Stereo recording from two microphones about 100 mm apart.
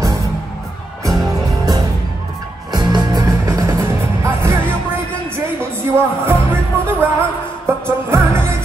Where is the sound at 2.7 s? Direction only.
45° right (ahead or behind); by 4.7 s 25° right (ahead or behind).